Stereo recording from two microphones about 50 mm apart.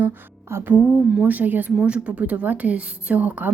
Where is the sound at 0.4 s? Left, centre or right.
Right.